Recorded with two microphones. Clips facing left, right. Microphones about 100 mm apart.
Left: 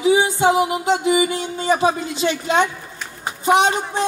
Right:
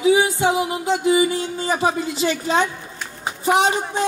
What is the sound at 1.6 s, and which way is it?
Speech, 25° left (ahead or behind).